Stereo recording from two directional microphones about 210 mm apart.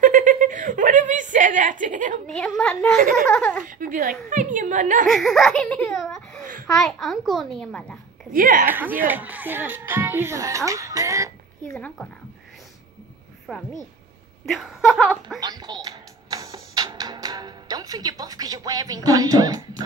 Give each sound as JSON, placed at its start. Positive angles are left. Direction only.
{"t": 0.0, "sound": "a sound", "side_deg": -40}
{"t": 2.2, "sound": "a child's voice", "side_deg": 5}
{"t": 3.0, "sound": "a woman's voice", "side_deg": -40}
{"t": 3.3, "sound": "a child's voice", "side_deg": 5}
{"t": 3.6, "sound": "speech", "side_deg": -40}
{"t": 5.0, "sound": "a child's voice", "side_deg": 0}
{"t": 8.3, "sound": "speech", "side_deg": -40}
{"t": 8.6, "sound": "a child's voice", "side_deg": -10}
{"t": 11.6, "sound": "a child's voice", "side_deg": 5}
{"t": 13.5, "sound": "a woman's voice", "side_deg": 0}
{"t": 15.4, "sound": "music", "side_deg": -20}